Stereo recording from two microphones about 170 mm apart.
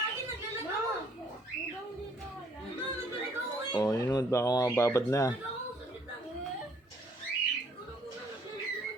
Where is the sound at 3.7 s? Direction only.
20° left (ahead or behind).